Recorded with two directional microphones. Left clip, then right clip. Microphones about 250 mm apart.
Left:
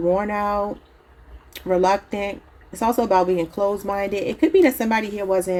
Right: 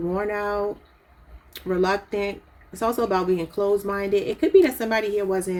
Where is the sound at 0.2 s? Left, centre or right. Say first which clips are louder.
Left 3 dB; left.